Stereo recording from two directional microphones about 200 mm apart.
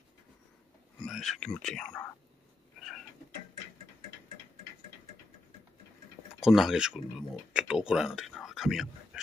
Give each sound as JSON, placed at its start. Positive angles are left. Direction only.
{"t": 1.0, "sound": "speech", "side_deg": 0}
{"t": 2.8, "sound": "cat", "side_deg": 0}
{"t": 6.4, "sound": "speech", "side_deg": 0}